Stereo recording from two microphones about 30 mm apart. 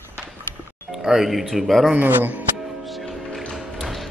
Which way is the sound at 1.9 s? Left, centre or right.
Right.